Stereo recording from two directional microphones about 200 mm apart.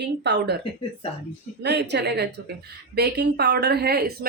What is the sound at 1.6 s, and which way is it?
A woman's voice, 55° right (ahead or behind).